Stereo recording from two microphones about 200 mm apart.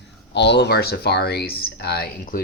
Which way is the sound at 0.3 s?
60° left (ahead or behind).